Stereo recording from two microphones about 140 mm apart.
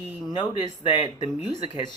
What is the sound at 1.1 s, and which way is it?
Speech, 50° right (ahead or behind).